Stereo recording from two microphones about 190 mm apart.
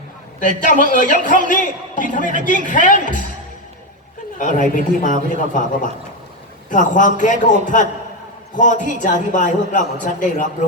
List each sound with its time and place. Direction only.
0.3 s a man's voice: 45° left (ahead or behind)
4.4 s a man's voice: 40° left (ahead or behind)
6.7 s a man's voice: 40° left (ahead or behind)